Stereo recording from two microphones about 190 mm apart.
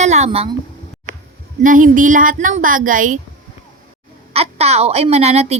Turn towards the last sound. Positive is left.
turn(degrees=-35)  # may be behind; listen again after turning